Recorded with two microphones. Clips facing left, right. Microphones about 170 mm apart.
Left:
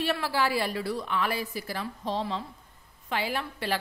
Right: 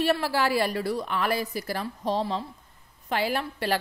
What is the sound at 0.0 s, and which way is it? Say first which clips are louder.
A woman's voice: right 3 dB; 40° right (ahead or behind).